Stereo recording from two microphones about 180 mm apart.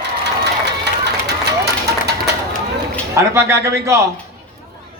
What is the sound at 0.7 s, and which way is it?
Run, 70° right (ahead or behind).